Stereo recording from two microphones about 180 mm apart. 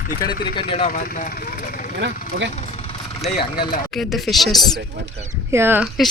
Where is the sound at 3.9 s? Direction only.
Centre (ahead or behind).